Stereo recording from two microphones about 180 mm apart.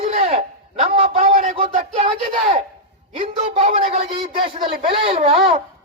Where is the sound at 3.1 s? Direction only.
35° right (ahead or behind).